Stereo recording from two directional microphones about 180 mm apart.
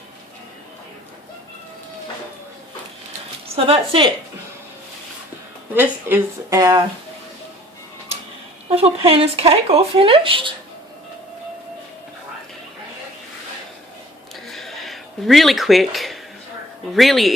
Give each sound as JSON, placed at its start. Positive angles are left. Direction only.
{"t": 3.5, "sound": "speech", "side_deg": -30}
{"t": 5.7, "sound": "speech", "side_deg": -10}
{"t": 8.7, "sound": "speech", "side_deg": -30}
{"t": 14.4, "sound": "a sound", "side_deg": 0}
{"t": 16.9, "sound": "speech", "side_deg": 0}